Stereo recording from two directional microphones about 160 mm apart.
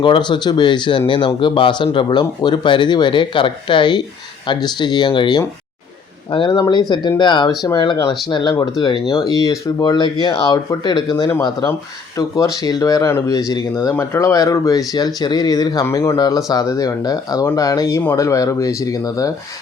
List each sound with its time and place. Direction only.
0.0 s speech: 30° left (ahead or behind)